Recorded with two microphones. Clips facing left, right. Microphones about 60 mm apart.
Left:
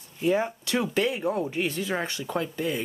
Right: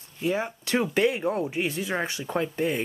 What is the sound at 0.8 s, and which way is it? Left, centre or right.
Speech, right.